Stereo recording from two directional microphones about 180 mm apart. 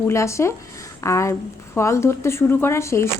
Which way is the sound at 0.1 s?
15° left (ahead or behind).